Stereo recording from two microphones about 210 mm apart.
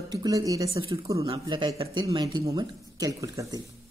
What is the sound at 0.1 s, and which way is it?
Speech, 15° right (ahead or behind).